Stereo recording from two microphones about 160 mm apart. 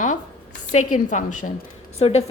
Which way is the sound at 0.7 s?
45° left (ahead or behind).